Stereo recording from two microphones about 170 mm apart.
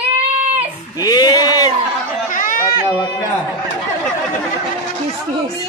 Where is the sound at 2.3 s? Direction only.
50° left (ahead or behind).